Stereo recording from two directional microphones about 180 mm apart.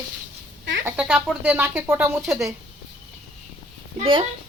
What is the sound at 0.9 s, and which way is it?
Speech, 5° right (ahead or behind).